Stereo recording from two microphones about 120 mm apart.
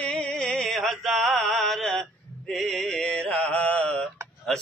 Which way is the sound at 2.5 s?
Centre (ahead or behind).